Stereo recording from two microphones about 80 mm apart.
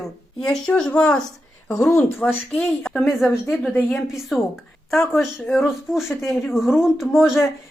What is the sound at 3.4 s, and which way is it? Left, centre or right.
Speech, centre.